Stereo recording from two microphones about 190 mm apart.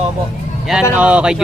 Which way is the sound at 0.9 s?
5° right (ahead or behind).